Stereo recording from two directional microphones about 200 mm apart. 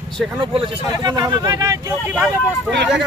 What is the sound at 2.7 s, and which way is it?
Speech, 60° right (ahead or behind).